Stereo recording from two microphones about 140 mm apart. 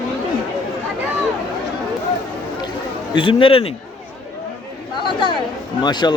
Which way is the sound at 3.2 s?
40° left (ahead or behind).